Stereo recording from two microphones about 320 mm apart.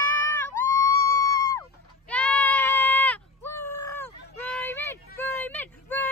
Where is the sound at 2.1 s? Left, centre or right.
Centre.